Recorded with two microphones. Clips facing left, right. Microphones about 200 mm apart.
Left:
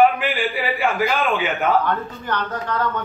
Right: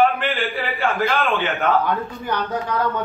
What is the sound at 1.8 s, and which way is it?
Speech, 10° right (ahead or behind).